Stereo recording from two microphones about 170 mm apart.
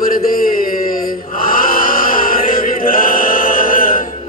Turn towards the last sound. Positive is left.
turn(degrees=55)  # may be behind; listen again after turning